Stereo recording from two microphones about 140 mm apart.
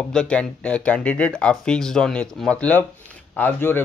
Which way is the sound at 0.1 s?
5° left (ahead or behind).